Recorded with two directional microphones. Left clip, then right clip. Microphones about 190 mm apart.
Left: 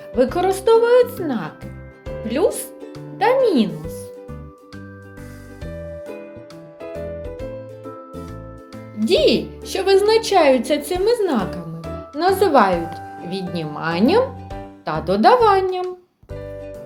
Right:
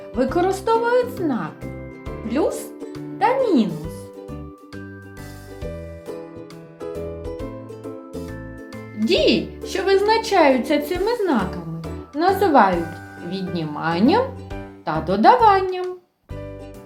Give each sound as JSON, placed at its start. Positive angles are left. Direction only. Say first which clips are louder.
{"t": 0.2, "sound": "speech", "louder": "left 2 dB", "side_deg": 25}
{"t": 9.0, "sound": "speech", "louder": "left 2 dB", "side_deg": 25}